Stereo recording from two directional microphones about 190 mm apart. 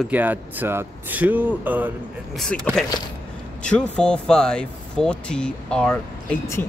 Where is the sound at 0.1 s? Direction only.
10° right (ahead or behind).